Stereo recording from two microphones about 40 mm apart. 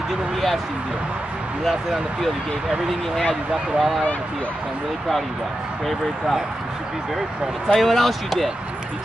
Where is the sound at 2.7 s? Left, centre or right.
Centre.